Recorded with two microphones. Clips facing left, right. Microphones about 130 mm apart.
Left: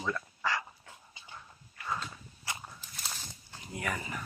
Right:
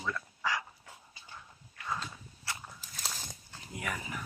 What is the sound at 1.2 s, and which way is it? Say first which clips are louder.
Dog: left 1 dB; 20° left (ahead or behind).